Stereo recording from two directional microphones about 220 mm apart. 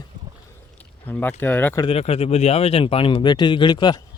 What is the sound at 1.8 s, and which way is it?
Speech, 25° left (ahead or behind).